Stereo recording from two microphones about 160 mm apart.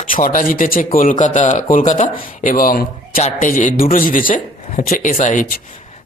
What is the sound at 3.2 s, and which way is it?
A man's voice, 55° left (ahead or behind).